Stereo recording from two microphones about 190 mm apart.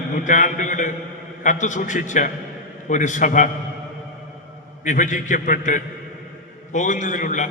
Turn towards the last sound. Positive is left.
turn(degrees=40)  # may be behind; listen again after turning